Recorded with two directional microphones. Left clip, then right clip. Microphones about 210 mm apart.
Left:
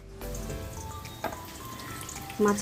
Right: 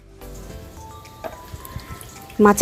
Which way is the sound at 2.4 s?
35° right (ahead or behind).